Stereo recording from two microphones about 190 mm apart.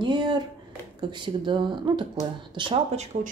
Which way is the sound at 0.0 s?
25° right (ahead or behind).